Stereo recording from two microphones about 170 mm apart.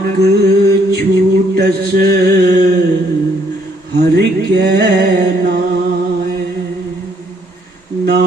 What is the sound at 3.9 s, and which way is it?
Mantra, 70° right (ahead or behind).